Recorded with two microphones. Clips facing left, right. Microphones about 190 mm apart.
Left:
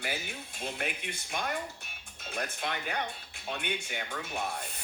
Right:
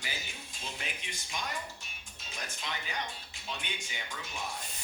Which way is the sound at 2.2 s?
60° left (ahead or behind).